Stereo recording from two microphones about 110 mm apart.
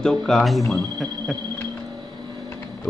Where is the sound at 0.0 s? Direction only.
5° left (ahead or behind).